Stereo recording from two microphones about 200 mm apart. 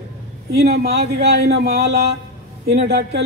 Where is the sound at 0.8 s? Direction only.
55° right (ahead or behind).